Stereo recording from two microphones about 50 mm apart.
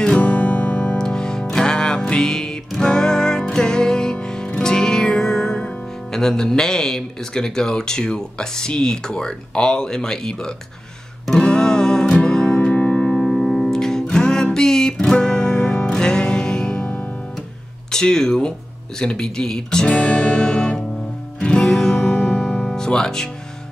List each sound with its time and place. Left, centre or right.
0.0 s music: left
6.1 s speech: centre
11.3 s music: centre
13.3 s music: centre
16.8 s music: left
17.9 s speech: centre
19.9 s music: left
22.8 s speech: centre